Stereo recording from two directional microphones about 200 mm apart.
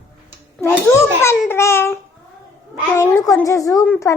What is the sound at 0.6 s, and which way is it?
Babbling, 15° left (ahead or behind).